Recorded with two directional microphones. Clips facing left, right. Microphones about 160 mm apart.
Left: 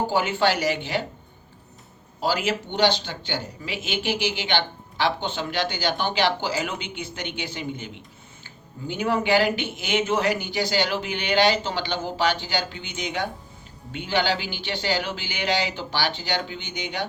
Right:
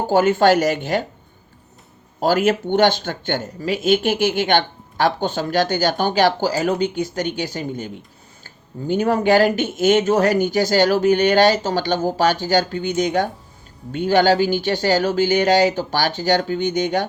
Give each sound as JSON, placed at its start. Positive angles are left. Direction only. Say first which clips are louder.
{"t": 0.1, "sound": "speech", "louder": "right 8 dB", "side_deg": -45}
{"t": 2.2, "sound": "speech", "louder": "right 8 dB", "side_deg": -50}